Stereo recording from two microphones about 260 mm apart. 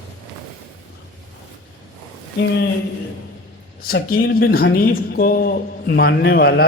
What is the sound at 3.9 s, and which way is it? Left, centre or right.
Speech, left.